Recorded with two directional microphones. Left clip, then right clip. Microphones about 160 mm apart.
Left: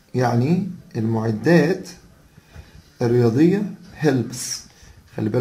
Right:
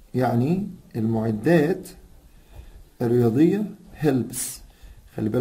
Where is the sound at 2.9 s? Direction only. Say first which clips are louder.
Left 2 dB; 80° right.